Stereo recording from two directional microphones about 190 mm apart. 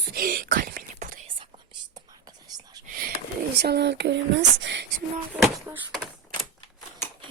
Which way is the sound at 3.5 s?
60° right (ahead or behind).